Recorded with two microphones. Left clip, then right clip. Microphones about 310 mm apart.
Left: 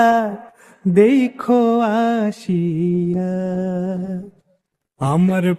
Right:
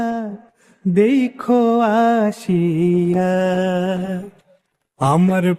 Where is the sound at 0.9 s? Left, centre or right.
Centre; by 4.2 s right.